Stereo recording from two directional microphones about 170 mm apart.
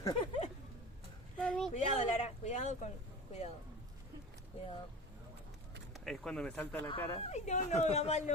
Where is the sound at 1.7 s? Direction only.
40° left (ahead or behind).